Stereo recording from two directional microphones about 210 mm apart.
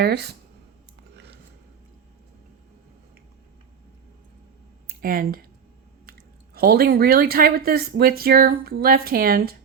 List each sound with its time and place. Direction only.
0.0 s speech: 50° right (ahead or behind)
1.1 s a sound: 55° right (ahead or behind)
4.9 s speech: 45° right (ahead or behind)